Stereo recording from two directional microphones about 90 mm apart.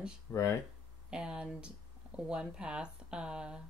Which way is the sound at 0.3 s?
30° left (ahead or behind).